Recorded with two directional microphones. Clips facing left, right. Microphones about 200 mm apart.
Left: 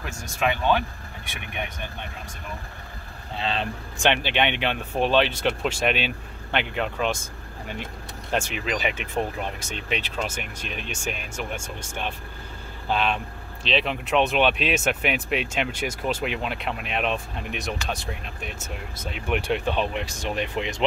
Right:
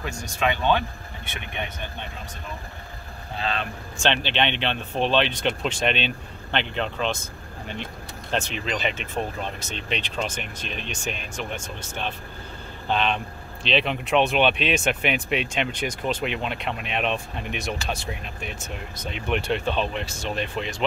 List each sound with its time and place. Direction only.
0.0 s speech: 5° left (ahead or behind)
3.3 s speech: 25° left (ahead or behind)
4.1 s speech: 10° left (ahead or behind)